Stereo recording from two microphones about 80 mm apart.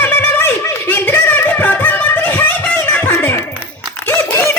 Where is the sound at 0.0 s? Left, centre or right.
Left.